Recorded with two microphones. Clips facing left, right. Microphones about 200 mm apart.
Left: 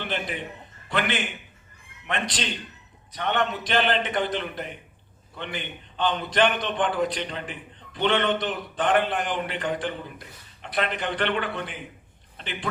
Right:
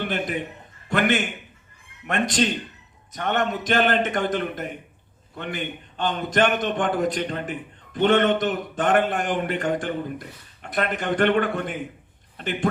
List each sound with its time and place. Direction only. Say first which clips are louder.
0.0 s a man's voice: right 4 dB; 45° right (ahead or behind)